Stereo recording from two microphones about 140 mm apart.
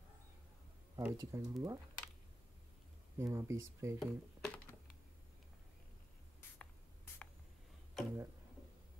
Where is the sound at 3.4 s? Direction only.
20° right (ahead or behind).